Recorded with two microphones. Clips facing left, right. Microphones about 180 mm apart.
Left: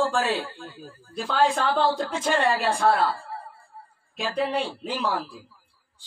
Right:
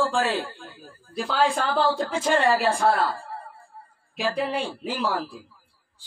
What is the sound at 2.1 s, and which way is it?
Speech, 10° right (ahead or behind).